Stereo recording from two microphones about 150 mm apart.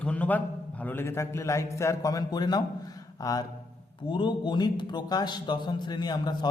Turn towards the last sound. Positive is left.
turn(degrees=30)  # may be behind; listen again after turning